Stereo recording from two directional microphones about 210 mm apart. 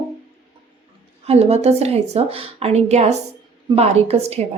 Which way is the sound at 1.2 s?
30° right (ahead or behind).